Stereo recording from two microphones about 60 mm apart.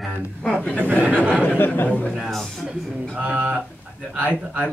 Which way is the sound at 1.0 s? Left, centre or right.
Right.